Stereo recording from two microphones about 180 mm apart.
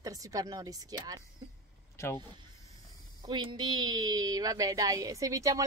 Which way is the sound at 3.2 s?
25° right (ahead or behind).